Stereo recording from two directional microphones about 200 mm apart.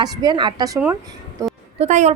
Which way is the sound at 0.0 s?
20° right (ahead or behind).